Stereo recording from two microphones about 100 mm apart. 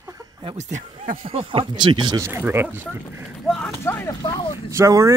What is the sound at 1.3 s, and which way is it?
Speech, 60° right (ahead or behind).